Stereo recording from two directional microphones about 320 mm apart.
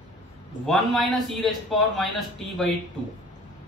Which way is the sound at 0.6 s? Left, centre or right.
Centre.